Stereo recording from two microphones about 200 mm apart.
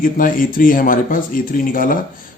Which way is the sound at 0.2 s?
45° left (ahead or behind).